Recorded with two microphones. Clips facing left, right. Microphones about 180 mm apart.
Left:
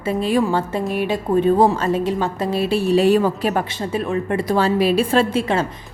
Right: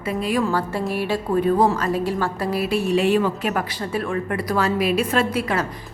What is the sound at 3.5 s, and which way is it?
A woman's voice, 25° left (ahead or behind).